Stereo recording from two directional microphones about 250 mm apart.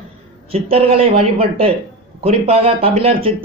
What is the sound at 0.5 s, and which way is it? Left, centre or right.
Speech, right.